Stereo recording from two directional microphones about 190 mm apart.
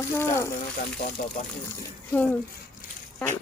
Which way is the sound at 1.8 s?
10° left (ahead or behind).